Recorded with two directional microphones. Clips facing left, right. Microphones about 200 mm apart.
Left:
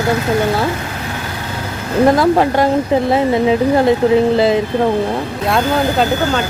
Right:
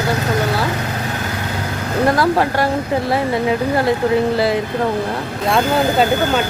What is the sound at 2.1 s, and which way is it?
Speech, 20° left (ahead or behind).